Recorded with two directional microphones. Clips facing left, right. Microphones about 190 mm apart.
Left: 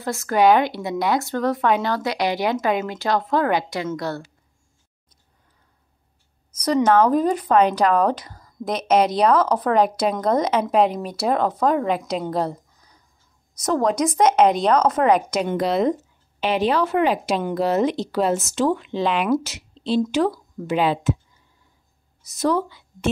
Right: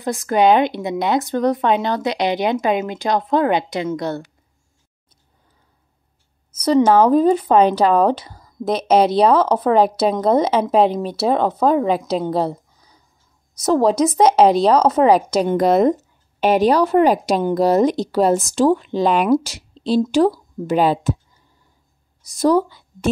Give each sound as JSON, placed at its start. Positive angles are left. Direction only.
{"t": 0.0, "sound": "speech", "side_deg": -15}
{"t": 6.6, "sound": "speech", "side_deg": -30}
{"t": 13.7, "sound": "speech", "side_deg": -30}
{"t": 22.4, "sound": "speech", "side_deg": -35}